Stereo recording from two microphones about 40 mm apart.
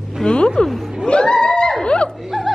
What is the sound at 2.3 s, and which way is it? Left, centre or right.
Music, centre.